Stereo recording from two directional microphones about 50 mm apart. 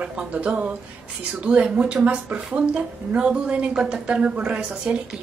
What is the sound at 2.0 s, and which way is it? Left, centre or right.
A woman's voice, right.